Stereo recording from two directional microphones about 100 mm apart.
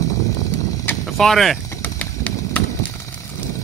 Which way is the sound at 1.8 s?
15° left (ahead or behind).